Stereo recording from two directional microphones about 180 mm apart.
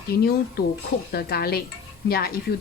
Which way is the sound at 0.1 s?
60° left (ahead or behind).